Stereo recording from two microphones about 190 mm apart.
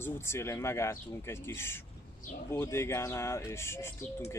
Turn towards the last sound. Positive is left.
turn(degrees=15)  # may be behind; listen again after turning